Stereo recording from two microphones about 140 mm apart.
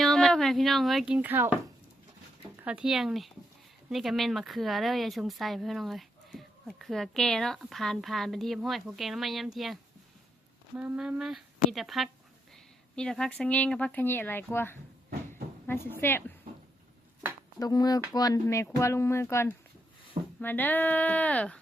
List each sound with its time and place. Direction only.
0.0 s speech: 5° left (ahead or behind); by 1.5 s 15° right (ahead or behind)
2.6 s speech: 5° right (ahead or behind)
10.8 s speech: 5° right (ahead or behind); by 16.2 s 15° left (ahead or behind)
17.6 s speech: 25° left (ahead or behind); by 21.6 s 10° left (ahead or behind)